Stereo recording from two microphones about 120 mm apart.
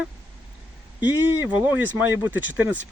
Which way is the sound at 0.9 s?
15° right (ahead or behind).